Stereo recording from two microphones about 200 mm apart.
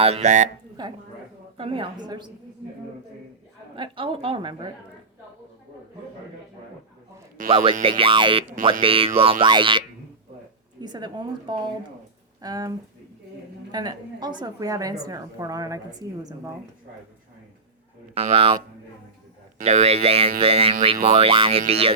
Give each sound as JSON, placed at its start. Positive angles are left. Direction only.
{"t": 0.0, "sound": "speech", "side_deg": -35}
{"t": 0.8, "sound": "a woman's voice", "side_deg": -20}
{"t": 3.8, "sound": "a woman's voice", "side_deg": -25}
{"t": 7.5, "sound": "a woman's voice", "side_deg": -25}
{"t": 18.1, "sound": "a woman's voice", "side_deg": -30}
{"t": 19.5, "sound": "a woman's voice", "side_deg": -35}